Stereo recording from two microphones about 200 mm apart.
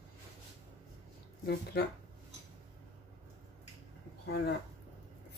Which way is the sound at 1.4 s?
50° left (ahead or behind).